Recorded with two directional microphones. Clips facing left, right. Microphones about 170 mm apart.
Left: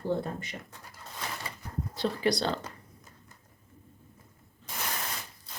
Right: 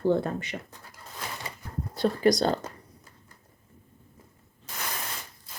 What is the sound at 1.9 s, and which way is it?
Speech, 45° right (ahead or behind).